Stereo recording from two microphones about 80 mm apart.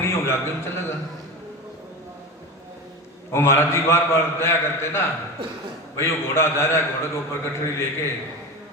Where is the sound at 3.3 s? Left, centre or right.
Left.